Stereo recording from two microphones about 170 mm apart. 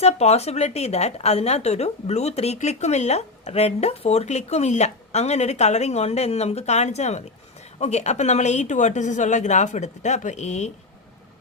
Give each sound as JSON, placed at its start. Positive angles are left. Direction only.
{"t": 0.0, "sound": "a woman's voice", "side_deg": 40}